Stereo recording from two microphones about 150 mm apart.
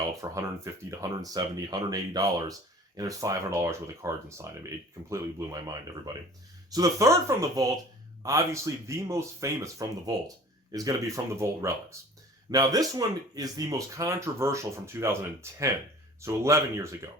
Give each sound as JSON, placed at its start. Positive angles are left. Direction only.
{"t": 0.2, "sound": "speech", "side_deg": -20}